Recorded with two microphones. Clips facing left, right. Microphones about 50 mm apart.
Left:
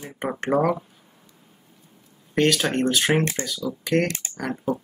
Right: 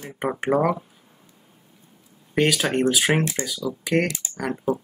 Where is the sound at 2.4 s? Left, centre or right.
Centre.